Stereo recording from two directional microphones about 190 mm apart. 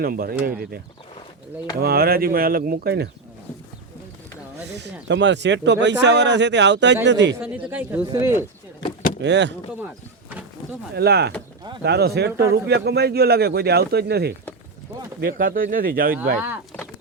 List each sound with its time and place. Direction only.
0.0 s speech: 50° right (ahead or behind)
1.8 s speech: 55° right (ahead or behind)
4.8 s speech: 65° right (ahead or behind)
7.3 s speech: 10° right (ahead or behind)
9.2 s a man's voice: 65° right (ahead or behind)
10.9 s a man's voice: 60° right (ahead or behind)